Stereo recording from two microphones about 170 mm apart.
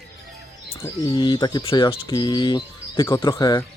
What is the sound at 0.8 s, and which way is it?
Speech, 15° left (ahead or behind).